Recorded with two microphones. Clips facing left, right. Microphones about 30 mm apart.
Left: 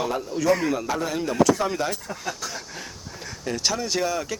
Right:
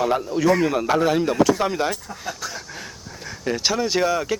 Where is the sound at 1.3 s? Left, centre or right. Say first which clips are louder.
Right 2 dB; centre.